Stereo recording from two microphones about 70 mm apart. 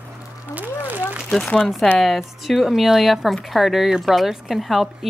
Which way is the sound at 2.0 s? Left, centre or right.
Centre.